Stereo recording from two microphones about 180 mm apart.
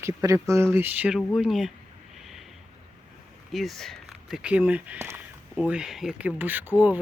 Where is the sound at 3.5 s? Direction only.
Centre (ahead or behind).